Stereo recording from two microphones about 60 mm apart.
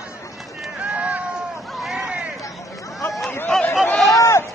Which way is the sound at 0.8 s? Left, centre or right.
Right.